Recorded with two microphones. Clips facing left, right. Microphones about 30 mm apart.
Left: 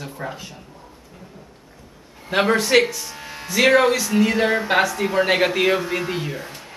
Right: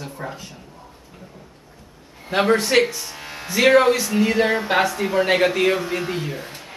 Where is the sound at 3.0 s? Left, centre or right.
Centre.